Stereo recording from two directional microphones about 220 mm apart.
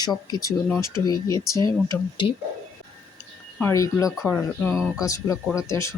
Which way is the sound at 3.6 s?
10° left (ahead or behind).